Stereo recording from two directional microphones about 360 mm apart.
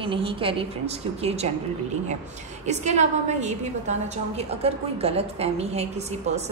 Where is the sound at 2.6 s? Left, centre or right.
Centre.